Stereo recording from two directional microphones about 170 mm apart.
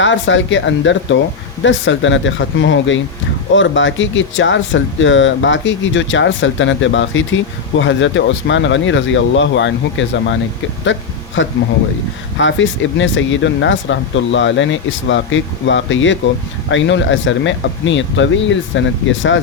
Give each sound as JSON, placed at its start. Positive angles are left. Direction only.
{"t": 0.0, "sound": "speech", "side_deg": 90}
{"t": 11.4, "sound": "speech", "side_deg": 90}